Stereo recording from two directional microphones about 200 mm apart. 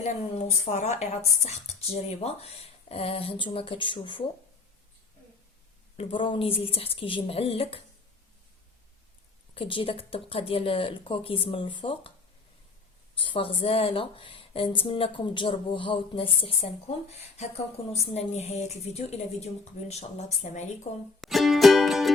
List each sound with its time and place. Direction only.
0.0 s speech: 35° left (ahead or behind)
6.0 s speech: 25° left (ahead or behind)
9.6 s speech: 25° left (ahead or behind)
13.1 s a woman's voice: 25° left (ahead or behind)
21.2 s music: centre (ahead or behind)